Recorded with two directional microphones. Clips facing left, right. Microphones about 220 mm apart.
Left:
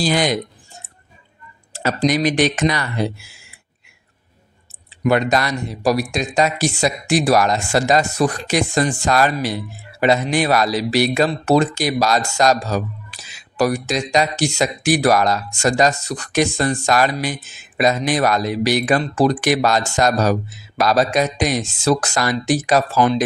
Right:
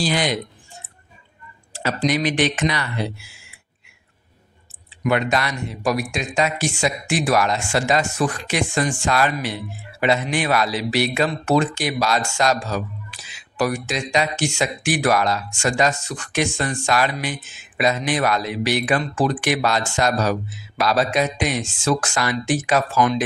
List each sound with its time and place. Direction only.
0.0 s speech: 45° left (ahead or behind)
1.7 s speech: 45° left (ahead or behind)
5.0 s speech: 40° left (ahead or behind)